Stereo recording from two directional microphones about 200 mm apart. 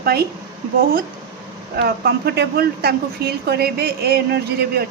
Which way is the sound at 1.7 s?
55° right (ahead or behind).